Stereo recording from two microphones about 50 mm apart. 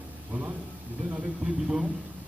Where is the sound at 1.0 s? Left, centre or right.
Right.